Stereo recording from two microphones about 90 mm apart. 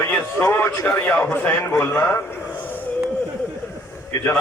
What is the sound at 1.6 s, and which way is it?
Speech, 30° left (ahead or behind).